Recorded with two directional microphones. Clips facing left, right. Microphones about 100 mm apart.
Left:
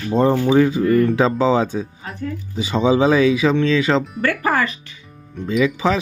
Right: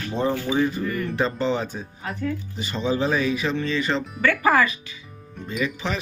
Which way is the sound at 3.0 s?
90° left.